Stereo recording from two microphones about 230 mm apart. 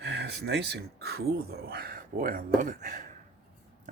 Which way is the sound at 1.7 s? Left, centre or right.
Right.